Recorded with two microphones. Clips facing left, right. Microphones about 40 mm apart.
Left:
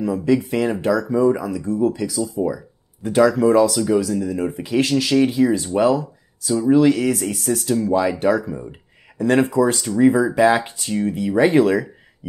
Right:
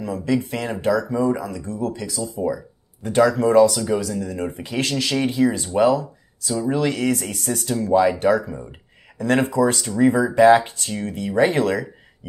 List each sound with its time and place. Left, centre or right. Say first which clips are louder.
0.0 s speech: left 4 dB; centre